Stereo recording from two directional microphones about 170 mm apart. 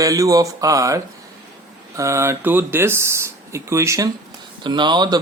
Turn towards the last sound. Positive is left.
turn(degrees=-25)  # may be behind; listen again after turning